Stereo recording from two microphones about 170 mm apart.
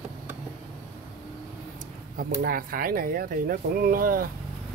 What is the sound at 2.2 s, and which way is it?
Speech, 55° right (ahead or behind).